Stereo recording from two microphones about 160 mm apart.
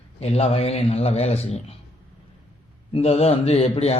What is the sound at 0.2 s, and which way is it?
Speech, 40° left (ahead or behind).